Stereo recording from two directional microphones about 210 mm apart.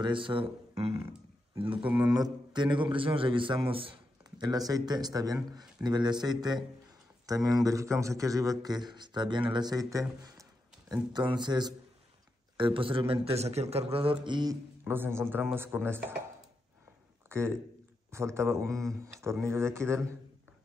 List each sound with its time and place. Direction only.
0.0 s a man's voice: 25° right (ahead or behind)
0.9 s a sound: 15° right (ahead or behind)
1.6 s a man's voice: 25° right (ahead or behind)
1.9 s a man's voice: 5° right (ahead or behind)
2.1 s a man's voice: 20° right (ahead or behind)
10.2 s a sound: 15° right (ahead or behind)
11.1 s a man's voice: 20° right (ahead or behind)
17.3 s a man's voice: 10° right (ahead or behind)